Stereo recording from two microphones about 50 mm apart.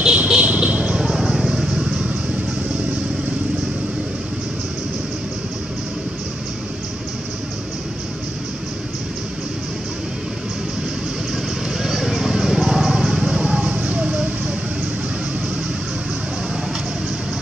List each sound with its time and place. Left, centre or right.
0.0 s a sound: centre
1.0 s vehicle: centre
11.7 s vehicle: centre; by 14.2 s right